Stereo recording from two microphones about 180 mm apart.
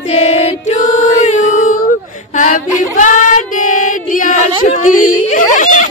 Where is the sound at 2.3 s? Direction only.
45° left (ahead or behind).